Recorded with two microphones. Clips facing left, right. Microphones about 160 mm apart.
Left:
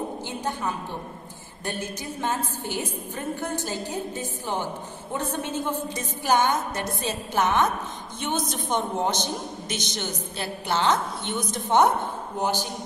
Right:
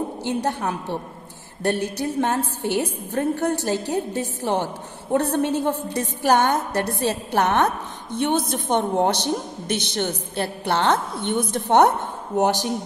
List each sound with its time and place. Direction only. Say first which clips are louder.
0.2 s a woman's voice: right 6 dB; 70° right (ahead or behind)
12.4 s speech: right 7 dB; 80° right